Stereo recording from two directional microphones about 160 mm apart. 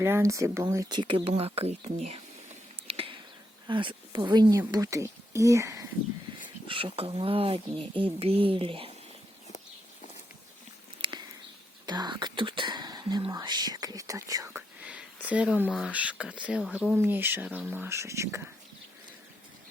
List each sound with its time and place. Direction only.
0.0 s speech: 15° right (ahead or behind); by 2.2 s 40° right (ahead or behind)
2.8 s a sound: 35° right (ahead or behind)
3.7 s speech: 30° right (ahead or behind)
6.7 s speech: 35° right (ahead or behind)
11.0 s a sound: 30° right (ahead or behind)
11.9 s speech: 25° right (ahead or behind)